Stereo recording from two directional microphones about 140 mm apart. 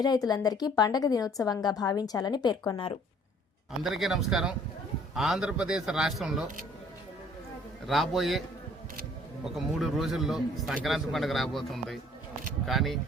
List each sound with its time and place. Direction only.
0.0 s a woman's voice: 25° left (ahead or behind)
3.7 s a man's voice: centre (ahead or behind)
7.9 s a man's voice: centre (ahead or behind)